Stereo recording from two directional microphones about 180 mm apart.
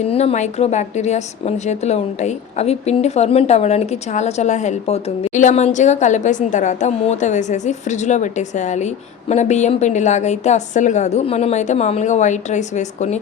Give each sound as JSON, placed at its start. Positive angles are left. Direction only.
{"t": 0.1, "sound": "a woman's voice", "side_deg": 35}